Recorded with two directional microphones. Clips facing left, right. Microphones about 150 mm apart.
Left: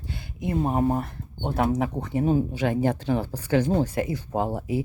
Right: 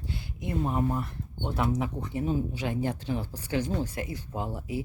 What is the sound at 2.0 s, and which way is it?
Speech, 65° left (ahead or behind).